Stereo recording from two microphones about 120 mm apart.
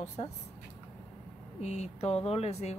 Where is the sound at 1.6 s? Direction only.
65° left (ahead or behind).